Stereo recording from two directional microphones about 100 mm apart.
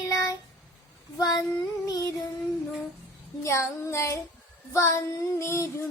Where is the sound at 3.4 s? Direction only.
30° left (ahead or behind).